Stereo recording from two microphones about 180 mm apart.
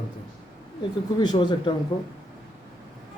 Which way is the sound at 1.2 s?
25° left (ahead or behind).